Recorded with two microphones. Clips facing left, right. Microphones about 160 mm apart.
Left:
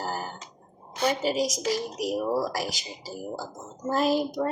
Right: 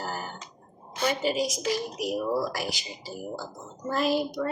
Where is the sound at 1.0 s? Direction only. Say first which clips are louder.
Left 1 dB; 40° left (ahead or behind).